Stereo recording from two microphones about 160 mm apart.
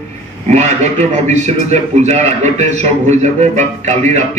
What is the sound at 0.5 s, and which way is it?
A man's voice, 45° right (ahead or behind).